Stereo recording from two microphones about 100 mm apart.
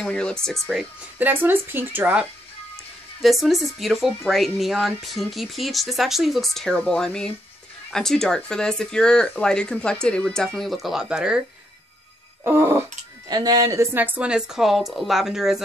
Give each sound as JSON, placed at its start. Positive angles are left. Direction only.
{"t": 0.0, "sound": "speech", "side_deg": 10}
{"t": 1.1, "sound": "speech", "side_deg": -20}
{"t": 3.2, "sound": "speech", "side_deg": 0}
{"t": 12.4, "sound": "speech", "side_deg": -25}
{"t": 13.3, "sound": "speech", "side_deg": -40}
{"t": 13.9, "sound": "speech", "side_deg": -15}